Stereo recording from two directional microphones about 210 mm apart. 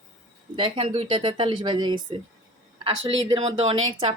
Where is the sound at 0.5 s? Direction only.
25° right (ahead or behind).